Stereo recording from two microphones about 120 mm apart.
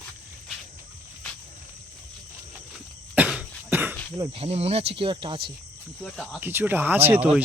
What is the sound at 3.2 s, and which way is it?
Cough, 10° right (ahead or behind).